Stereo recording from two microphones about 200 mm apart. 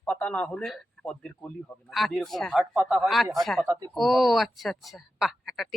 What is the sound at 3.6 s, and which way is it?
Speech, 20° right (ahead or behind).